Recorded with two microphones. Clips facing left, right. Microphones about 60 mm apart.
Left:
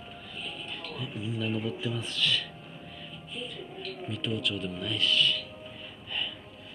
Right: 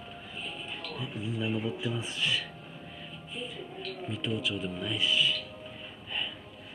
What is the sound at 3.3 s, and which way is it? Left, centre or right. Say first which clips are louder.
Speech: even; centre.